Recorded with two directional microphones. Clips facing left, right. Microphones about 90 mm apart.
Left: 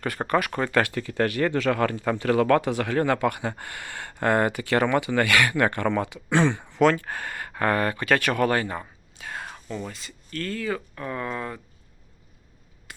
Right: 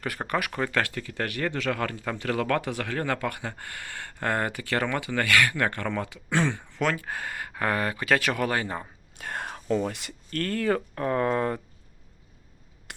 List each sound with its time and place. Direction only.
0.0 s speech: 5° right (ahead or behind)
0.9 s speech: 35° left (ahead or behind)
6.9 s speech: 15° right (ahead or behind)
9.1 s speech: 50° right (ahead or behind)